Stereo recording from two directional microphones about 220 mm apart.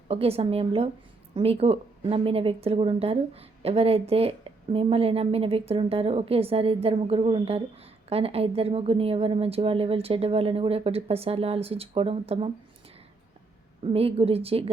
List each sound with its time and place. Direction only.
0.1 s speech: 25° right (ahead or behind)
13.8 s speech: 25° right (ahead or behind)